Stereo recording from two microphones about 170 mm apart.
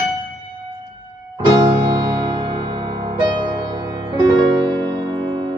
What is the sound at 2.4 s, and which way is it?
Music, 25° right (ahead or behind).